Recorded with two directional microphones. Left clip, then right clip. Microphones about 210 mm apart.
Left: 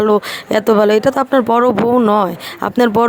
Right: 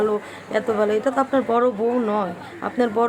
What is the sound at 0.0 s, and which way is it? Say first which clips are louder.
Speech: left 9 dB; 45° left (ahead or behind).